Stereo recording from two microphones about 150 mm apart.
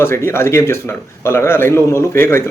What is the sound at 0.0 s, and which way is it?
Speech, 15° left (ahead or behind).